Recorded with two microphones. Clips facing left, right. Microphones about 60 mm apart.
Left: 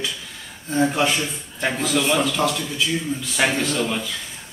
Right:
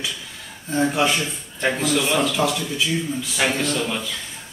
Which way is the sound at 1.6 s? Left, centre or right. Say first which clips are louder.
Right 1 dB; centre.